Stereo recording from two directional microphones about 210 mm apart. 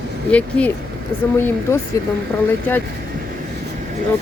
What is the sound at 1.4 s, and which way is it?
Speech, 10° left (ahead or behind).